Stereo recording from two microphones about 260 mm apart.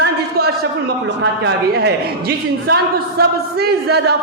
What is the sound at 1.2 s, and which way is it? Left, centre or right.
Speech, right.